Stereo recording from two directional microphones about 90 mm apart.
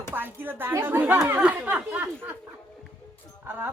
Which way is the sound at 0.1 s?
20° right (ahead or behind).